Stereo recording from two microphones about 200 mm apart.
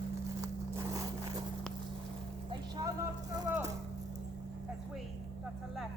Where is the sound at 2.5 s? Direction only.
20° right (ahead or behind).